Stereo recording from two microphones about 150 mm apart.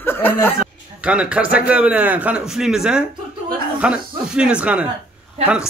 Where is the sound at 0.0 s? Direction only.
15° left (ahead or behind).